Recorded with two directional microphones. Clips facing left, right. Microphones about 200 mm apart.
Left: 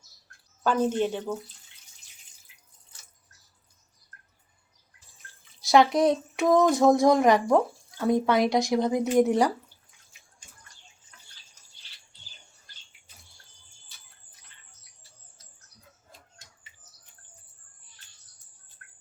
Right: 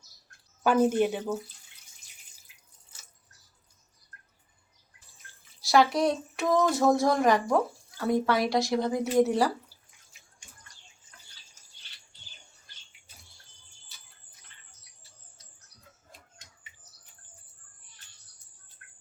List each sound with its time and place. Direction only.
0.6 s speech: 10° right (ahead or behind)
5.5 s speech: 20° left (ahead or behind)
18.8 s bird: 20° right (ahead or behind)